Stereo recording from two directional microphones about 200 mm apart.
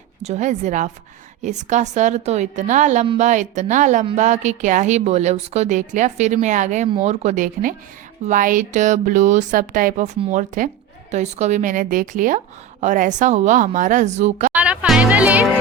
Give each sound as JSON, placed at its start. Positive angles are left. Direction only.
{"t": 0.2, "sound": "a woman's voice", "side_deg": -35}
{"t": 14.5, "sound": "speech", "side_deg": -5}